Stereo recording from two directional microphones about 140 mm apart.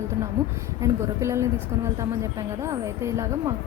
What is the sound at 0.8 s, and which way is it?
A woman's voice, 20° right (ahead or behind).